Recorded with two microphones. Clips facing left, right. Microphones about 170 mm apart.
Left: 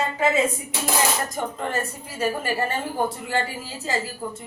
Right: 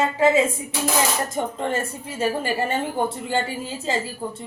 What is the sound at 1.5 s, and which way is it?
Speech, 25° right (ahead or behind).